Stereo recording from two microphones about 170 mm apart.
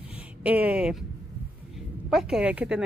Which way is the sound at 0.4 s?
10° right (ahead or behind).